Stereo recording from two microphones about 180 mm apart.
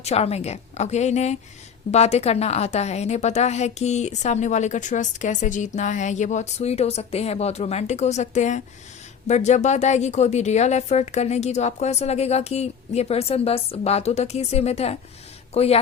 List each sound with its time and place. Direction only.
0.0 s a woman's voice: 35° left (ahead or behind)